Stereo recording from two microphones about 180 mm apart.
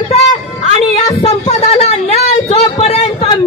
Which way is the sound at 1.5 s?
35° left (ahead or behind).